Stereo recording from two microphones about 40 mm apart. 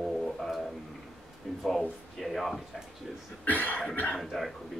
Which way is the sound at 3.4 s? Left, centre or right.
Left.